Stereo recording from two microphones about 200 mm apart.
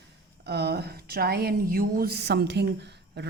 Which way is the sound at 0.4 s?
55° right (ahead or behind).